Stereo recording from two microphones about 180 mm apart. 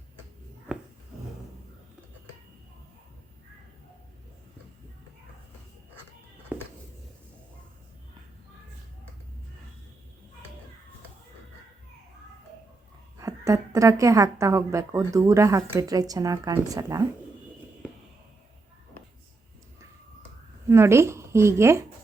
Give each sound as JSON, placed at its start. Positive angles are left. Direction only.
{"t": 6.5, "sound": "a sound", "side_deg": -10}
{"t": 13.1, "sound": "a woman's voice", "side_deg": -20}
{"t": 20.7, "sound": "a woman's voice", "side_deg": -15}